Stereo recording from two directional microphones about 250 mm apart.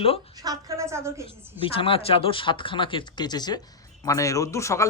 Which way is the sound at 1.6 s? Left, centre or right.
Left.